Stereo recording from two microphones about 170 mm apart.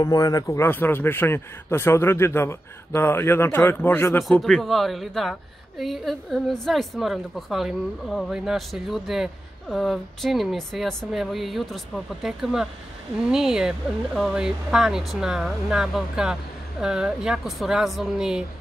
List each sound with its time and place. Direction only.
0.0 s speech: 20° left (ahead or behind)
4.2 s speech: centre (ahead or behind)